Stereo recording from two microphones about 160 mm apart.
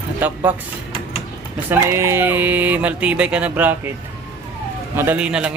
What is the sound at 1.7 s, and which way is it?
Speech, 15° right (ahead or behind).